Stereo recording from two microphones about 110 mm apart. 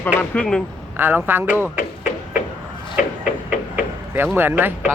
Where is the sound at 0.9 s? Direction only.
20° right (ahead or behind).